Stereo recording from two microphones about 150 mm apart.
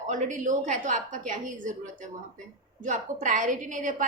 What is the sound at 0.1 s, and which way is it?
Speech, 55° right (ahead or behind).